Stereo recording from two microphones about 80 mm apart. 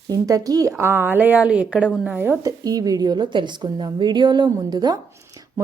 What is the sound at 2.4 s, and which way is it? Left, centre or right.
A woman's voice, right.